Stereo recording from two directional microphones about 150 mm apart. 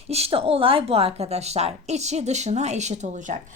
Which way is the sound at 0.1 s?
40° right (ahead or behind).